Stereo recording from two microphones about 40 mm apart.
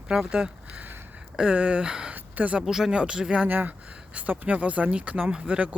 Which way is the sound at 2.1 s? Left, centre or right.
Right.